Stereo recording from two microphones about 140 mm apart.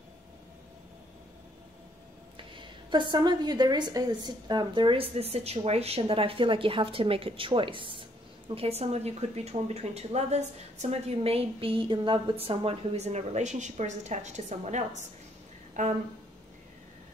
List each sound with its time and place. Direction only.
2.3 s a woman's voice: 35° right (ahead or behind); by 15.9 s 60° right (ahead or behind)